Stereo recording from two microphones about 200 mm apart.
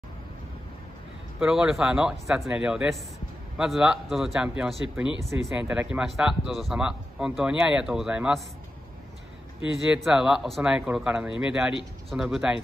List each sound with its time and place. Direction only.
1.4 s speech: centre (ahead or behind)
9.8 s speech: centre (ahead or behind)